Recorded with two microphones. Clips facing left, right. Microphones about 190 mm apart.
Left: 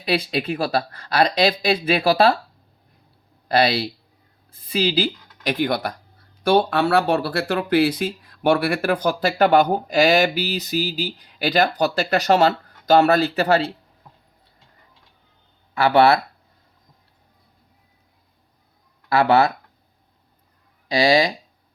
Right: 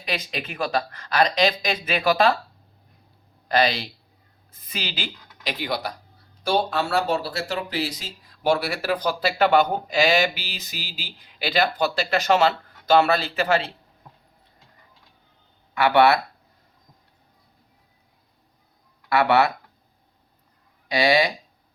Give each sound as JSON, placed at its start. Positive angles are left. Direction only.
{"t": 0.0, "sound": "speech", "side_deg": 35}
{"t": 3.5, "sound": "a woman's voice", "side_deg": 35}
{"t": 5.4, "sound": "speech", "side_deg": 50}
{"t": 15.7, "sound": "speech", "side_deg": 30}
{"t": 19.0, "sound": "speech", "side_deg": 30}